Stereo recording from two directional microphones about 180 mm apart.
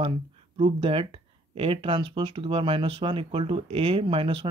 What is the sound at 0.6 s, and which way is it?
Speech, 30° right (ahead or behind).